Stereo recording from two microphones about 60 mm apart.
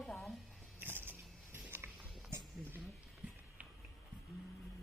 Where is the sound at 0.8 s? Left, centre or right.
Right.